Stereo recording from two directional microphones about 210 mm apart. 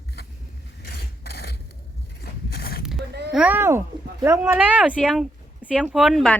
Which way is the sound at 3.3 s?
5° right (ahead or behind).